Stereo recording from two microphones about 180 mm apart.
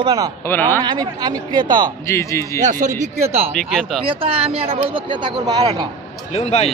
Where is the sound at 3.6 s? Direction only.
5° left (ahead or behind).